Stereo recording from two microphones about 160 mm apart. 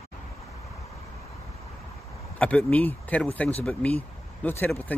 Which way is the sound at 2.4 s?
5° left (ahead or behind).